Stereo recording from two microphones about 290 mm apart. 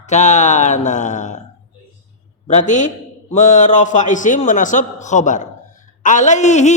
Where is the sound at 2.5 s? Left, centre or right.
Left.